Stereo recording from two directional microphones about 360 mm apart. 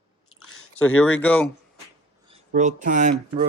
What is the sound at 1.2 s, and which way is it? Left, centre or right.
Speech, centre.